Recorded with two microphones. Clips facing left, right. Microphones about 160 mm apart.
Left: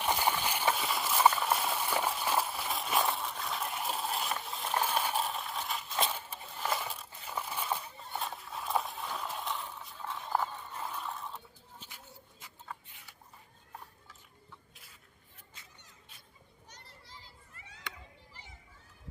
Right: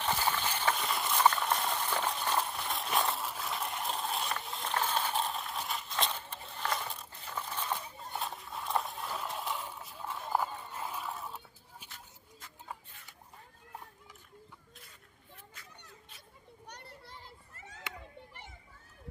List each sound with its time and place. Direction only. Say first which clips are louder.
0.0 s clip-clop: left 1 dB; 15° left (ahead or behind); by 11.9 s 5° right (ahead or behind)
11.9 s a sound: left 1 dB; 10° left (ahead or behind)
16.6 s children playing: right 6 dB; 60° right (ahead or behind)